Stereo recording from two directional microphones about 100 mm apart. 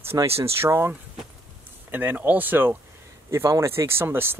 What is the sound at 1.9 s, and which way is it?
Speech, 20° right (ahead or behind).